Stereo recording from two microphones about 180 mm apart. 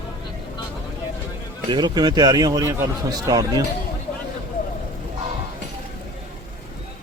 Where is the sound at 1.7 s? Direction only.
25° right (ahead or behind).